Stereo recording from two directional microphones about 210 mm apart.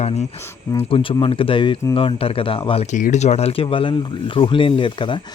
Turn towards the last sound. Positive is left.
turn(degrees=25)  # may be behind; listen again after turning